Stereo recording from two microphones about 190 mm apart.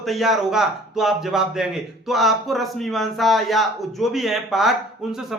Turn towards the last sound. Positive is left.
turn(degrees=0)  # may be behind; listen again after turning